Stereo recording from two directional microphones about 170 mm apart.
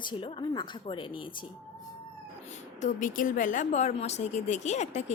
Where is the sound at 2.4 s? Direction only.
45° left (ahead or behind).